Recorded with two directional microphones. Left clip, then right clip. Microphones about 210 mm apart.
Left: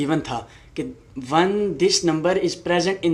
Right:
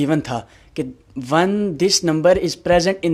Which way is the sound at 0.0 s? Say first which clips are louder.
Right 3 dB; 45° right (ahead or behind).